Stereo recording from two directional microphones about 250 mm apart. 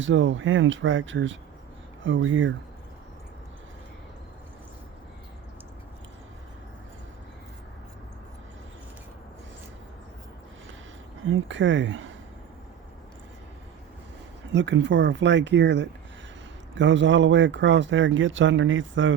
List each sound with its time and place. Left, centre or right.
0.0 s speech: right
11.3 s speech: right
14.5 s speech: right